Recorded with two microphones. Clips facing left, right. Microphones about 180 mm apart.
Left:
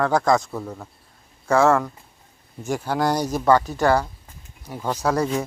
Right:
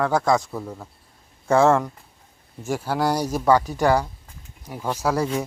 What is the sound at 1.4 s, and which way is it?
Speech, 25° right (ahead or behind).